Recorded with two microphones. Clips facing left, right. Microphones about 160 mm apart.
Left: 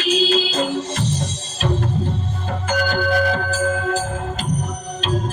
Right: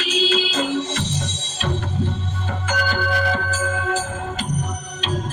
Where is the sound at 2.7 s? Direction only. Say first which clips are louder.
Left 4 dB; 45° left (ahead or behind).